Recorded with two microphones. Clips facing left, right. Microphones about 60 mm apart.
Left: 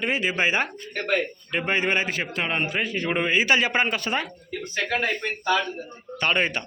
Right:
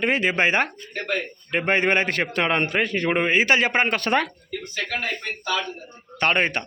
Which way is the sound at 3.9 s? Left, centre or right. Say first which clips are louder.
Right 5 dB; right.